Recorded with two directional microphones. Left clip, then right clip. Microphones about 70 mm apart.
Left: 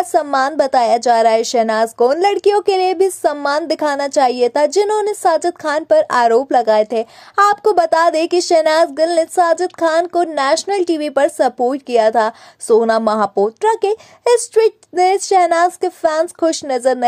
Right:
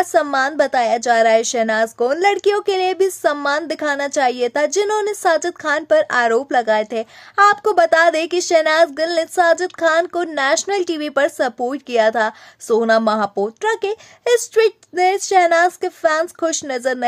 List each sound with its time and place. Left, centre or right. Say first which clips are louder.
0.0 s a woman's voice: left 1 dB; centre
3.4 s a woman's voice: left 3 dB; left